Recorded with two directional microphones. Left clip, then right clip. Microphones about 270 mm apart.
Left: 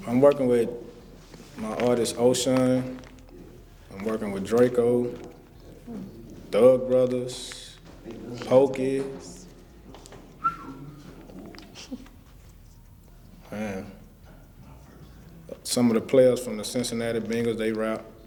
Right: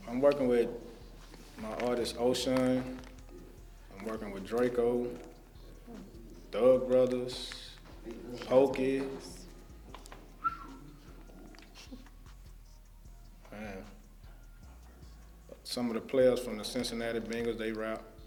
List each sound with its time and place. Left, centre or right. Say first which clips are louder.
0.0 s speech: left 8 dB; left
6.5 s speech: left 7 dB; left
9.1 s music: left 4 dB; left
10.0 s whistling: left 7 dB; left
13.5 s speech: left 11 dB; left
15.4 s speech: left 12 dB; left